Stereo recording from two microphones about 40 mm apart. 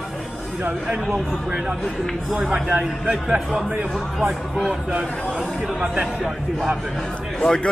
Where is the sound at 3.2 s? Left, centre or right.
Right.